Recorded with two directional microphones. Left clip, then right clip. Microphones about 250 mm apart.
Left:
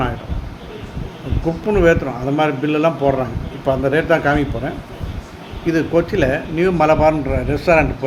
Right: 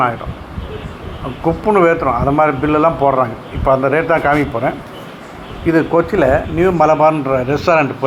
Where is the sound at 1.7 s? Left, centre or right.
Centre.